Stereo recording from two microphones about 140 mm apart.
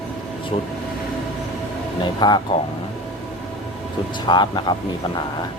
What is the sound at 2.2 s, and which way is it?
Speech, 30° left (ahead or behind).